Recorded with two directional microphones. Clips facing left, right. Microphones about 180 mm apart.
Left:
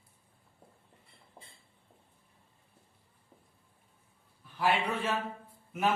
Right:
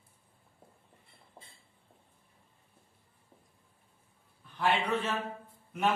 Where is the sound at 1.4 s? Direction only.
5° right (ahead or behind).